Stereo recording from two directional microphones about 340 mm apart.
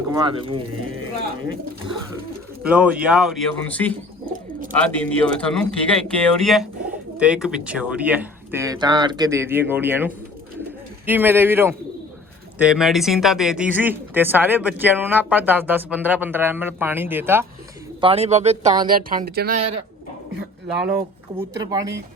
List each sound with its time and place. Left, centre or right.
0.1 s speech: centre
2.6 s speech: centre
18.0 s speech: centre
21.3 s speech: centre